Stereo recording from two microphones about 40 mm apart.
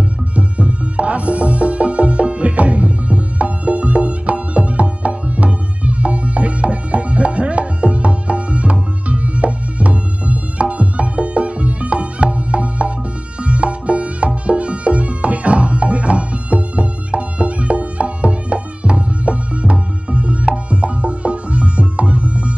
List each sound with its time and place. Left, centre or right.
0.4 s music: right